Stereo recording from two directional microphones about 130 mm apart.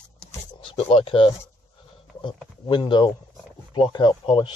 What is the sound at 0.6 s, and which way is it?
Speech, 45° left (ahead or behind).